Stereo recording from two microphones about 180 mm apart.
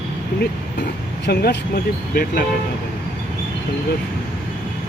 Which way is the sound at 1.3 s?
65° left (ahead or behind).